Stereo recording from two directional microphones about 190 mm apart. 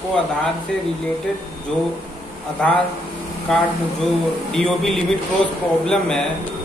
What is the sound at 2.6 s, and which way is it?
Speech, 5° left (ahead or behind).